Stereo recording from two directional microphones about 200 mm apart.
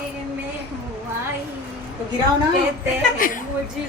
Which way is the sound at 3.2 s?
45° left (ahead or behind).